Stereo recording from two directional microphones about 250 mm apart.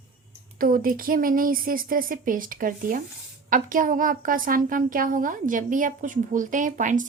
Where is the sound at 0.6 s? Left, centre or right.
Right.